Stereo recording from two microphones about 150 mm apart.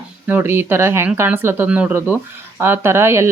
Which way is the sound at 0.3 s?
15° right (ahead or behind).